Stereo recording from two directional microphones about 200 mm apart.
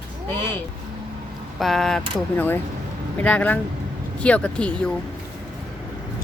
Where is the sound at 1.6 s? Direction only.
Centre (ahead or behind).